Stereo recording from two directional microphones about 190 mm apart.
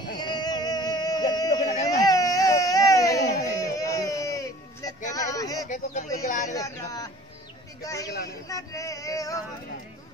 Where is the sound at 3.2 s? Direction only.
15° left (ahead or behind).